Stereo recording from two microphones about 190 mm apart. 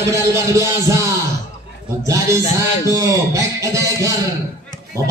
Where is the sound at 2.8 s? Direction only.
15° right (ahead or behind).